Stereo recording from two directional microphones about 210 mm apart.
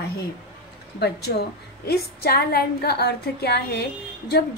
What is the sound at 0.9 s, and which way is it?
A woman's voice, 50° left (ahead or behind).